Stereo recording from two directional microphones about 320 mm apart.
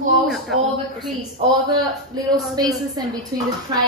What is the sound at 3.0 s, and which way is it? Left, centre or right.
Speech, centre.